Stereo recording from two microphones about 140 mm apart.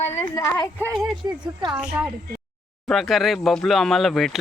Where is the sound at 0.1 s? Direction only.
20° left (ahead or behind).